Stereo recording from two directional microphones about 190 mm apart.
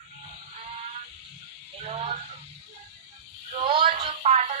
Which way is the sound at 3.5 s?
25° right (ahead or behind).